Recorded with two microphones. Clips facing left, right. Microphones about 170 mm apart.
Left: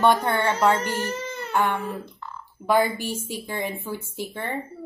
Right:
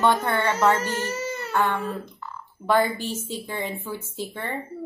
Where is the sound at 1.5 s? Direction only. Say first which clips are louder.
Left 1 dB; 15° left (ahead or behind).